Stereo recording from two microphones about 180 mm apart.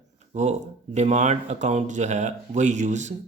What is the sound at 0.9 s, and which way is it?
Speech, 40° right (ahead or behind).